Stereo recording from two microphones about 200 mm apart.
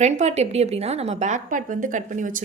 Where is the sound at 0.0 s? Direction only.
35° right (ahead or behind).